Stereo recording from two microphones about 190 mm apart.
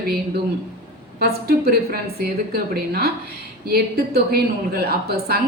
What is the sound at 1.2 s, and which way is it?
A woman's voice, 55° right (ahead or behind).